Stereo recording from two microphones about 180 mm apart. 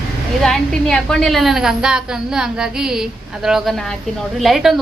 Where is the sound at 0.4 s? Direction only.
Centre (ahead or behind).